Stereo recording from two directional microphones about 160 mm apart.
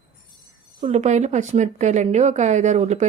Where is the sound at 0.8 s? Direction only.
45° right (ahead or behind).